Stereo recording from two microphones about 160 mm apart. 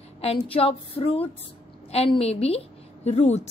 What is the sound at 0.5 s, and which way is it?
A woman's voice, 35° left (ahead or behind).